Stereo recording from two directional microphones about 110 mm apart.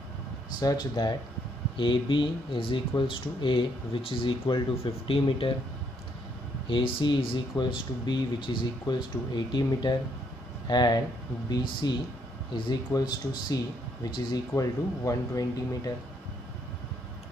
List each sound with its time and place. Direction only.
0.6 s speech: 40° left (ahead or behind); by 5.5 s 55° left (ahead or behind)
6.7 s speech: 45° left (ahead or behind); by 15.9 s 30° left (ahead or behind)